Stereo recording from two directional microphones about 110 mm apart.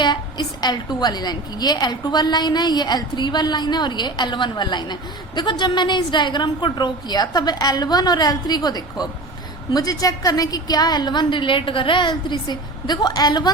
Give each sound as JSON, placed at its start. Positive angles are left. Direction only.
{"t": 0.0, "sound": "a woman's voice", "side_deg": 45}